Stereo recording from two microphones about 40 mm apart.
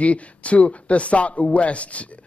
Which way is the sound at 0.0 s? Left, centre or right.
Left.